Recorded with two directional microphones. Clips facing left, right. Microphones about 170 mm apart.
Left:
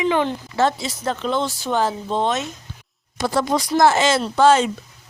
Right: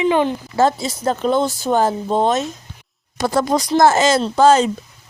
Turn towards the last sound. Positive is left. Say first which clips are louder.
# right 2 dB
turn(degrees=-40)  # may be behind; listen again after turning